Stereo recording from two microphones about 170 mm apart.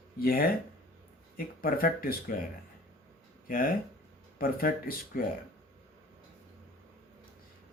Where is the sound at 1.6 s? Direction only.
60° left (ahead or behind).